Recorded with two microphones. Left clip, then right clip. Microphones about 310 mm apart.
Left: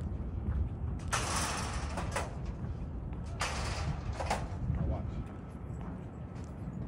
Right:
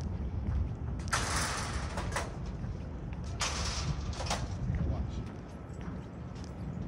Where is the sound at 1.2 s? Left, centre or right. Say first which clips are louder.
Even; left.